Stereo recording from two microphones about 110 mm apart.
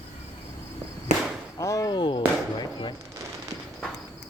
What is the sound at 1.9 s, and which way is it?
Speech, 45° left (ahead or behind).